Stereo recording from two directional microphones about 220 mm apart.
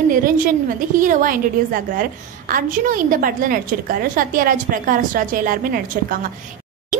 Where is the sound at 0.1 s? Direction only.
40° right (ahead or behind).